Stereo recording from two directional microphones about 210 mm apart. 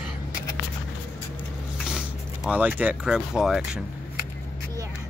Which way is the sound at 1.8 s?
5° right (ahead or behind).